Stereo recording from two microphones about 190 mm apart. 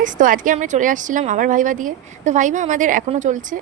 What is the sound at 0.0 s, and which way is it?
A woman's voice, 45° right (ahead or behind).